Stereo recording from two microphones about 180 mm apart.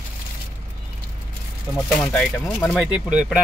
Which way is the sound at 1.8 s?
5° left (ahead or behind).